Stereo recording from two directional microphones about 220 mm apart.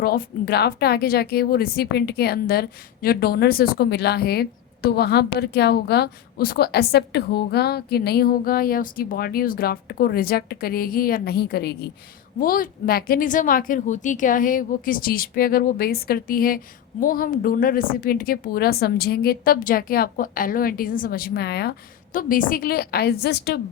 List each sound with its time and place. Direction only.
0.0 s a woman's voice: 45° left (ahead or behind)